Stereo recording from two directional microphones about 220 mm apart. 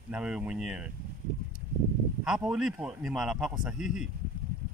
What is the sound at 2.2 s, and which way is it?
Speech, 5° right (ahead or behind).